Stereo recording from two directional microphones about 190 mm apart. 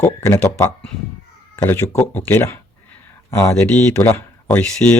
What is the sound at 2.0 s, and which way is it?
Speech, 10° left (ahead or behind).